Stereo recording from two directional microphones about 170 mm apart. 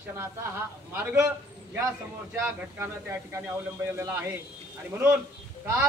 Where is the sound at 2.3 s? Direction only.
15° right (ahead or behind).